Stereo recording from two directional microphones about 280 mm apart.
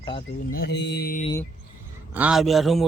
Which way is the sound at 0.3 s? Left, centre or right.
Left.